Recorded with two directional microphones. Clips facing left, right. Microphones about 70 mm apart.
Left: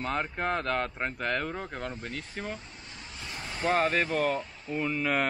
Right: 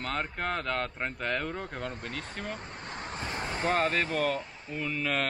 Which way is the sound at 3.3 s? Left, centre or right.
Right.